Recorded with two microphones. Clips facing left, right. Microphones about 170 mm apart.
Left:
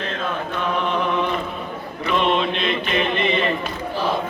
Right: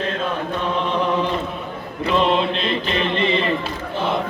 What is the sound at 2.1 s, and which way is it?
Mantra, 30° right (ahead or behind).